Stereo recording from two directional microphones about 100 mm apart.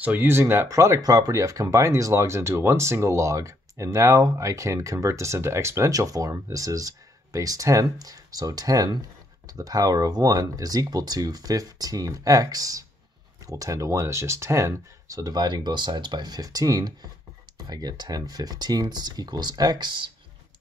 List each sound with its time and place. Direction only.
0.0 s speech: 15° right (ahead or behind); by 20.1 s 50° right (ahead or behind)